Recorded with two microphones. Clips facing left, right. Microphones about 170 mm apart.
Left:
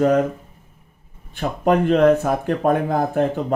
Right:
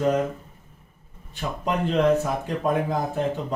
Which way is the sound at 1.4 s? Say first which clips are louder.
Left 8 dB; 55° left (ahead or behind).